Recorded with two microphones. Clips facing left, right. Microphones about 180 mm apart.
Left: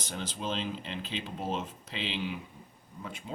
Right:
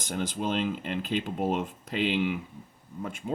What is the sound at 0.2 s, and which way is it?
Speech, 50° right (ahead or behind).